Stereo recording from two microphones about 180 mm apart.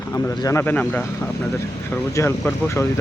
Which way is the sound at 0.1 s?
15° left (ahead or behind).